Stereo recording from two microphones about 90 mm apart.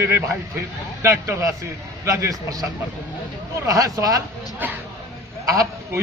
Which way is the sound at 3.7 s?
45° right (ahead or behind).